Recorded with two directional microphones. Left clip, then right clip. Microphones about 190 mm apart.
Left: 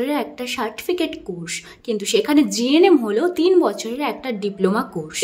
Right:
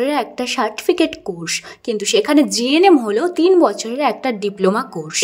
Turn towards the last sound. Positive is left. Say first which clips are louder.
# right 3 dB
turn(degrees=-30)  # may be behind; listen again after turning